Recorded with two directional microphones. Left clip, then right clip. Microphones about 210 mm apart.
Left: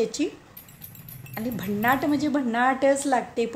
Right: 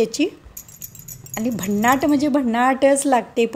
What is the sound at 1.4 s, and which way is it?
Speech, 35° right (ahead or behind).